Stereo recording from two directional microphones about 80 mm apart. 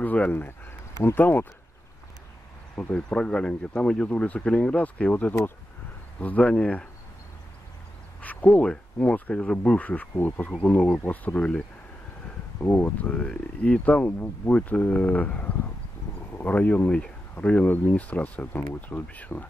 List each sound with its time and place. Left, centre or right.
0.0 s speech: left
0.9 s speech: left
2.7 s speech: centre
8.2 s speech: centre
12.5 s speech: left
13.1 s speech: centre